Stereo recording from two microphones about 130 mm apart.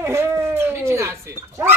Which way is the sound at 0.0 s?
20° right (ahead or behind).